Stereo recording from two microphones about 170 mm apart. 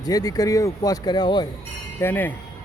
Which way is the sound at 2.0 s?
10° left (ahead or behind).